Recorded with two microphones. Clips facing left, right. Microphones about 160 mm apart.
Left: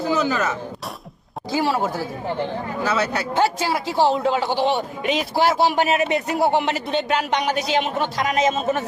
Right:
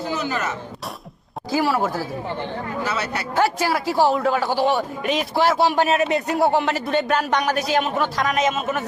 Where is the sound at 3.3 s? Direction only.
20° left (ahead or behind).